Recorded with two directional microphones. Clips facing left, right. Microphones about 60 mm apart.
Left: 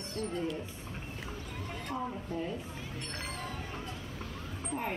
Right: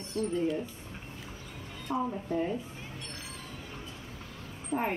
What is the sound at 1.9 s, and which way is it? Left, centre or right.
Speech, right.